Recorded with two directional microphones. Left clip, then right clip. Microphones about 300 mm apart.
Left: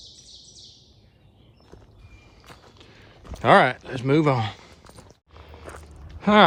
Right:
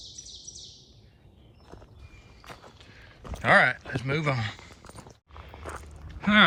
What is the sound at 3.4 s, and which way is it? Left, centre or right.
Speech, centre.